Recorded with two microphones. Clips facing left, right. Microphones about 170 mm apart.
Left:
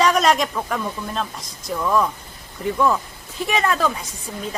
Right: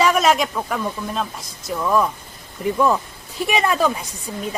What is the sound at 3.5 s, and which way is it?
Speech, 15° right (ahead or behind).